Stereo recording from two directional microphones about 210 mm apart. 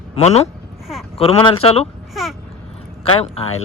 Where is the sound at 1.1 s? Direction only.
30° left (ahead or behind).